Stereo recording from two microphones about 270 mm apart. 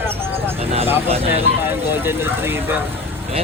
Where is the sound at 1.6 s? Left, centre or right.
Centre.